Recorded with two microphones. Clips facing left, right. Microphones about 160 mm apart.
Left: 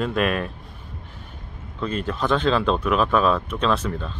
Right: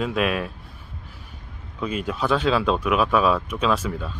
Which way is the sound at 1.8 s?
10° right (ahead or behind).